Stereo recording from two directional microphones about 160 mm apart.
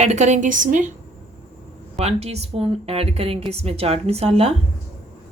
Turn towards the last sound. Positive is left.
turn(degrees=-40)  # may be behind; listen again after turning